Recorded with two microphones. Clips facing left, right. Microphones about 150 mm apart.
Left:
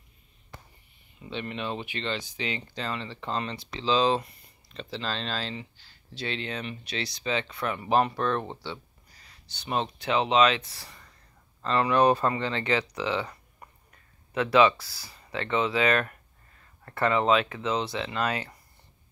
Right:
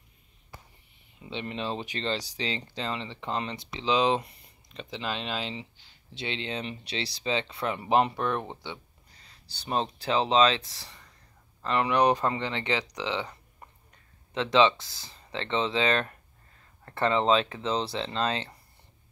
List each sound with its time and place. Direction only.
1.3 s speech: 25° right (ahead or behind)
9.2 s speech: 35° right (ahead or behind)
11.6 s speech: 15° right (ahead or behind)